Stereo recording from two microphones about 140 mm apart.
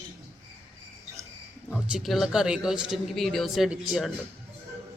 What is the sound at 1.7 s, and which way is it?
Speech, 5° right (ahead or behind).